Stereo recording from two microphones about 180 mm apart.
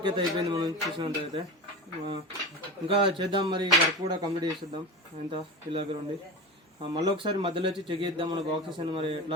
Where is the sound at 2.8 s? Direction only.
30° right (ahead or behind).